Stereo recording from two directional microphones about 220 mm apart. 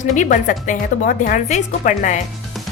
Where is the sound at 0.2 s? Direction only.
35° left (ahead or behind).